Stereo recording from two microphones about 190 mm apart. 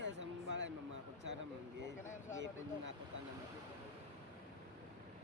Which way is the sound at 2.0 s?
40° left (ahead or behind).